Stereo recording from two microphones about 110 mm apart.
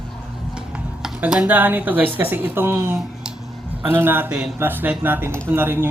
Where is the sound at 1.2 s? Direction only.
10° right (ahead or behind).